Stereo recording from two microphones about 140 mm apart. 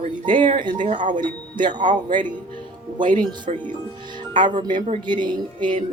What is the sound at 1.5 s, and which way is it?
Speech, 35° right (ahead or behind).